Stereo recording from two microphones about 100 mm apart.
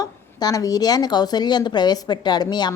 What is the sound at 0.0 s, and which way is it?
A woman's voice, 40° left (ahead or behind).